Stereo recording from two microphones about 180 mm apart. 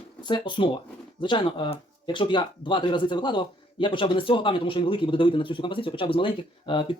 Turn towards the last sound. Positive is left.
turn(degrees=25)  # may be behind; listen again after turning